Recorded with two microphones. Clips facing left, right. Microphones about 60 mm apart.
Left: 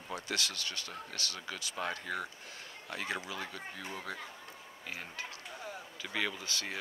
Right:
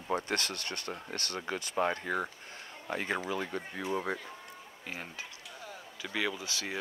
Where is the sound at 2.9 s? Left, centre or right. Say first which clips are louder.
Right 5 dB; right.